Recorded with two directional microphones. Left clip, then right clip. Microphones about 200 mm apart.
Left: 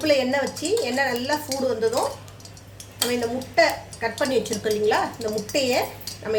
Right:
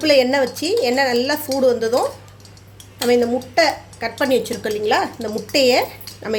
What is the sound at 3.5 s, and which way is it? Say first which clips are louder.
A woman's voice: right 2 dB; 55° right (ahead or behind).